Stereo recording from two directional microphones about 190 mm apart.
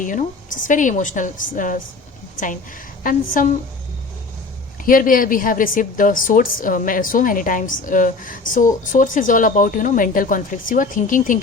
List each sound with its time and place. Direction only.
0.0 s a woman's voice: 45° left (ahead or behind)
4.9 s a woman's voice: 45° left (ahead or behind)